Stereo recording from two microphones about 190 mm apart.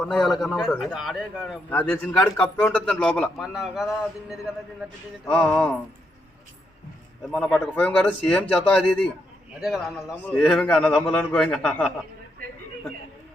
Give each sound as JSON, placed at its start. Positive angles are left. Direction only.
{"t": 0.0, "sound": "a man's voice", "side_deg": 0}
{"t": 7.3, "sound": "a man's voice", "side_deg": 5}